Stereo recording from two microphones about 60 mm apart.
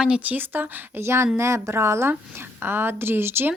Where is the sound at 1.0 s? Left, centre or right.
Right.